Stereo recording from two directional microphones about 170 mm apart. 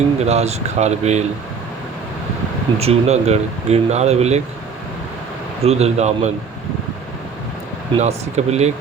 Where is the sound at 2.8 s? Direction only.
40° right (ahead or behind).